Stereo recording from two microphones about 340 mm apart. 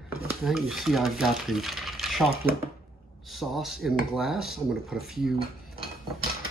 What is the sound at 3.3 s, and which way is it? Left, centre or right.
Speech, centre.